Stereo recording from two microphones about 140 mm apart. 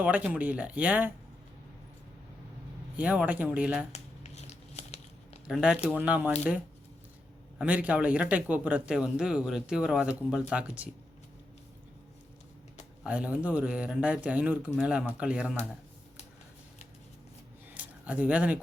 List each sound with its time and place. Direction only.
0.0 s speech: 10° right (ahead or behind)
3.0 s speech: 10° right (ahead or behind)
3.9 s a sound: 50° left (ahead or behind)
5.5 s speech: 5° right (ahead or behind)
7.6 s speech: 10° right (ahead or behind)
13.1 s speech: 10° right (ahead or behind)
17.7 s speech: 10° right (ahead or behind)